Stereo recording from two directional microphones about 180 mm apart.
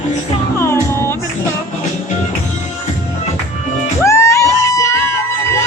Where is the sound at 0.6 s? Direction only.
15° left (ahead or behind).